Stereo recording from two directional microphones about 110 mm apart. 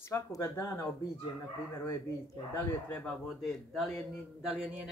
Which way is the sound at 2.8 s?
15° left (ahead or behind).